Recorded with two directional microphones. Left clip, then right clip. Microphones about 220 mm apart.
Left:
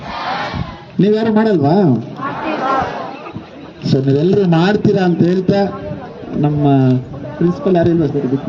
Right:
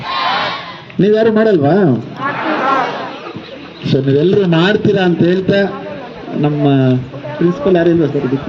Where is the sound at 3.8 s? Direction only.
50° left (ahead or behind).